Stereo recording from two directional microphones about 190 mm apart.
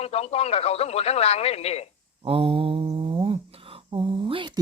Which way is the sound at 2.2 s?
30° right (ahead or behind).